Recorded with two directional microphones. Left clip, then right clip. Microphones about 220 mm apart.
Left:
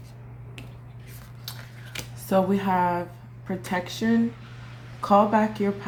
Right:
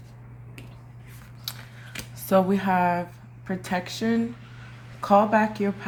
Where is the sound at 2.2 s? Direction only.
45° right (ahead or behind).